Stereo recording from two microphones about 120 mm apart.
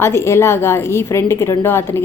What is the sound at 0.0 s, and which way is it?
A woman's voice, 20° left (ahead or behind).